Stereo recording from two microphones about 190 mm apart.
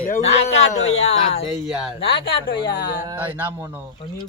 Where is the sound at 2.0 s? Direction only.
65° left (ahead or behind).